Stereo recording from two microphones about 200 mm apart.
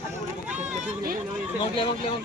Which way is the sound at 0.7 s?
40° right (ahead or behind).